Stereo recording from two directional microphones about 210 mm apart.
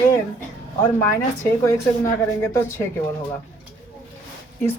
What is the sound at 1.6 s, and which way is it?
Speech, 15° left (ahead or behind).